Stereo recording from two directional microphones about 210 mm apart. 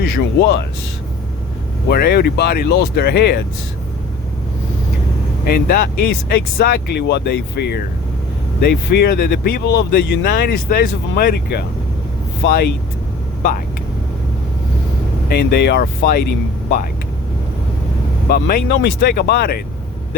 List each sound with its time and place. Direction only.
0.0 s speech: 50° left (ahead or behind)
1.9 s speech: 45° left (ahead or behind)
5.5 s speech: 45° left (ahead or behind)
15.3 s speech: 50° left (ahead or behind)
18.3 s speech: 45° left (ahead or behind)